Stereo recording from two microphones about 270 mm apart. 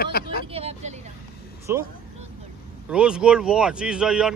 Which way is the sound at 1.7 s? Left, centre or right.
Centre.